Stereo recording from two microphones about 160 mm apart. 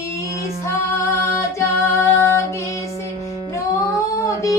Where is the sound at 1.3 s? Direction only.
15° left (ahead or behind).